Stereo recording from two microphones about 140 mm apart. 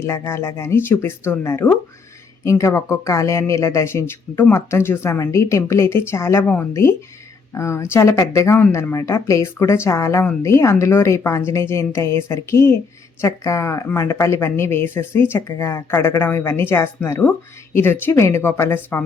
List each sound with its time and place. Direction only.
0.0 s speech: 20° left (ahead or behind)